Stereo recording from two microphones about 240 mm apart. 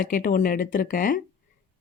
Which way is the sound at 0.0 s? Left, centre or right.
Left.